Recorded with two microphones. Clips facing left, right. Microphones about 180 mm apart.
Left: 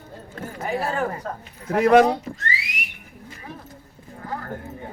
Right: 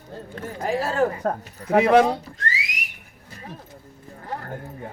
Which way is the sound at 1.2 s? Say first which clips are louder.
Right 7 dB; 60° right (ahead or behind).